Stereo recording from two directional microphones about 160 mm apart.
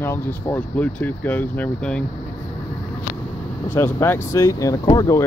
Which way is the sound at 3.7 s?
15° left (ahead or behind).